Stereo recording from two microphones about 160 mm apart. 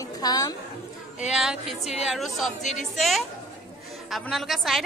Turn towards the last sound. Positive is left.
turn(degrees=0)  # may be behind; listen again after turning